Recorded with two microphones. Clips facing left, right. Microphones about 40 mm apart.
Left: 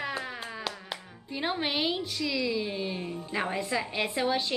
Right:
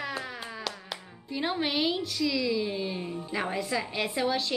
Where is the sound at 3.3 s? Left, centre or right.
Centre.